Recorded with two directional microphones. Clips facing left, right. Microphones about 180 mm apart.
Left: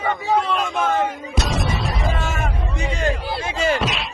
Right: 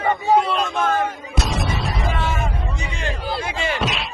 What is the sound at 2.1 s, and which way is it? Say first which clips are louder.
Vehicle: right 1 dB; 45° left (ahead or behind).